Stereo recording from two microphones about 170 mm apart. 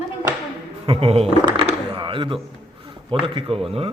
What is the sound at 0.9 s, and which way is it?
Speech, 35° right (ahead or behind).